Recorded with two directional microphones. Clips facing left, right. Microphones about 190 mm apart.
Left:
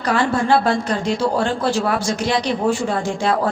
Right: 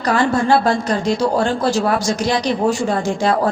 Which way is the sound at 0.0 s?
40° right (ahead or behind).